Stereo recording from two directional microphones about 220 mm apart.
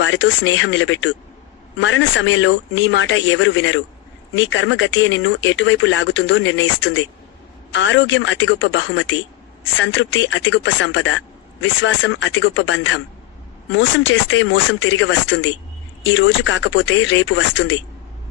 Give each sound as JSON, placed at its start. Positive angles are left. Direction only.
{"t": 0.0, "sound": "speech", "side_deg": 60}